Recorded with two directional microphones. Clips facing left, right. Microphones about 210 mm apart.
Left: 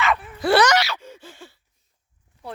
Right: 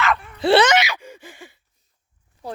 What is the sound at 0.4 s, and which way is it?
Gasp, 25° right (ahead or behind).